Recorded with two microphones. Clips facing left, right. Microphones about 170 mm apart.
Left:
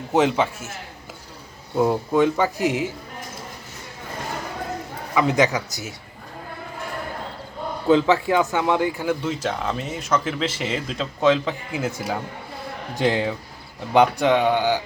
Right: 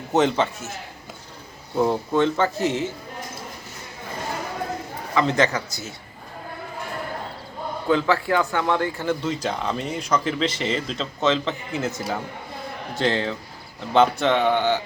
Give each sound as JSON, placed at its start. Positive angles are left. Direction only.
{"t": 0.1, "sound": "speech", "side_deg": 5}
{"t": 1.7, "sound": "speech", "side_deg": 5}
{"t": 5.1, "sound": "speech", "side_deg": 15}
{"t": 7.9, "sound": "speech", "side_deg": 20}